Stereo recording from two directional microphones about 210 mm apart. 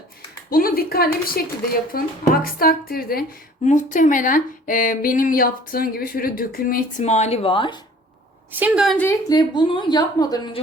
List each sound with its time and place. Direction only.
0.5 s a woman's voice: 45° left (ahead or behind); by 7.8 s 25° left (ahead or behind)
8.5 s a woman's voice: 5° right (ahead or behind)
9.0 s a woman's voice: 20° left (ahead or behind)